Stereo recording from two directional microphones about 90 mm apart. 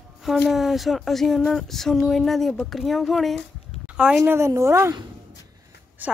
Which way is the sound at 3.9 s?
10° right (ahead or behind).